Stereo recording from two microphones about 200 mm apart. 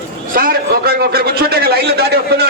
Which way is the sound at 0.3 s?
50° right (ahead or behind).